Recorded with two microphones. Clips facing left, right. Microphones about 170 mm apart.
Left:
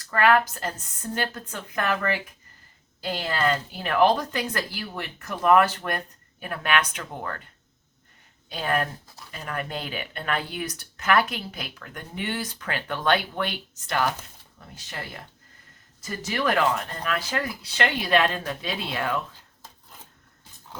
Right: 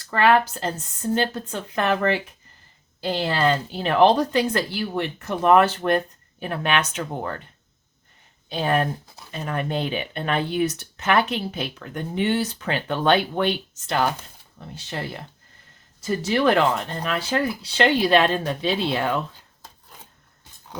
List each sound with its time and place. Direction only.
0.1 s speech: 30° right (ahead or behind)
8.4 s speech: 25° right (ahead or behind)